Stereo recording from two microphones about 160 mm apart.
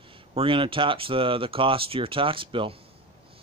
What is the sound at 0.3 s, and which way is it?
Speech, 35° right (ahead or behind).